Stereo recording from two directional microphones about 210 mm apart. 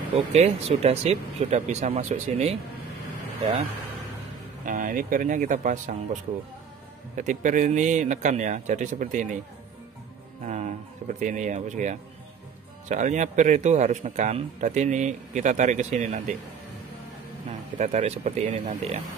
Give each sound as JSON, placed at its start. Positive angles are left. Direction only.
{"t": 0.1, "sound": "a man's voice", "side_deg": -30}
{"t": 4.6, "sound": "a man's voice", "side_deg": -40}
{"t": 7.2, "sound": "a man's voice", "side_deg": -35}
{"t": 10.4, "sound": "a man's voice", "side_deg": -35}
{"t": 17.5, "sound": "a man's voice", "side_deg": -35}